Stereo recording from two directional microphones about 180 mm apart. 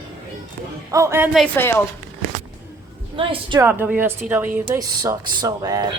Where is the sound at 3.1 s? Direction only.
30° right (ahead or behind).